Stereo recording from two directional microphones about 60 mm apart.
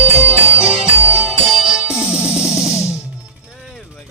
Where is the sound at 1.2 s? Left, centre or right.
Centre.